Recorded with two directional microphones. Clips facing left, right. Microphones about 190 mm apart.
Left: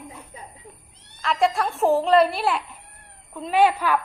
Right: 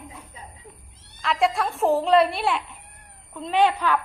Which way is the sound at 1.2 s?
Centre (ahead or behind).